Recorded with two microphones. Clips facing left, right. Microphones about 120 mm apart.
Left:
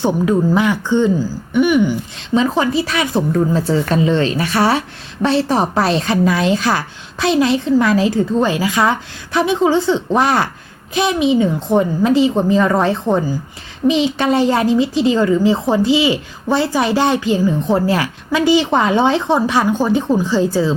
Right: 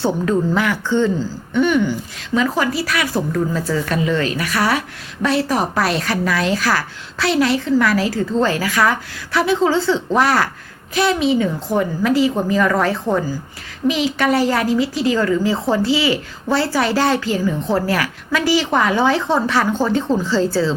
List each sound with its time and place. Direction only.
0.0 s a woman's voice: 15° left (ahead or behind)